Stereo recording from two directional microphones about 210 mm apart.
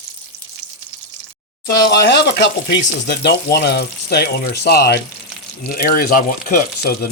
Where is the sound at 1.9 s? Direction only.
55° left (ahead or behind).